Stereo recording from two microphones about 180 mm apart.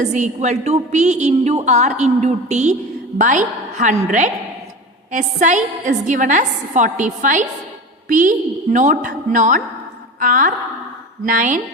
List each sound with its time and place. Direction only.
0.0 s a woman's voice: 40° right (ahead or behind)